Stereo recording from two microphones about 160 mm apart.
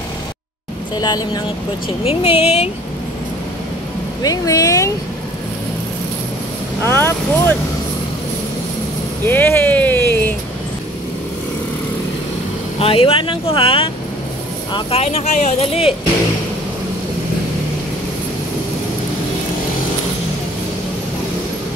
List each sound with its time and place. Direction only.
0.9 s speech: 25° left (ahead or behind)
2.0 s speech: 35° left (ahead or behind)
4.2 s speech: 20° left (ahead or behind)
6.8 s speech: 15° left (ahead or behind)
9.3 s a sound: 15° left (ahead or behind)
12.7 s speech: 35° left (ahead or behind)